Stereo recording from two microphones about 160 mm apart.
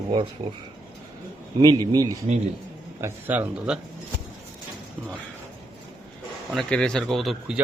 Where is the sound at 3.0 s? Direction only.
10° right (ahead or behind).